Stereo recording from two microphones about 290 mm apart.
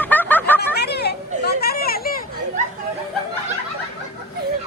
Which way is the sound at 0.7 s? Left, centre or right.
Left.